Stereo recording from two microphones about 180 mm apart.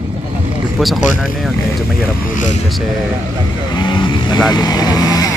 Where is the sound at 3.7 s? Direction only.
25° left (ahead or behind).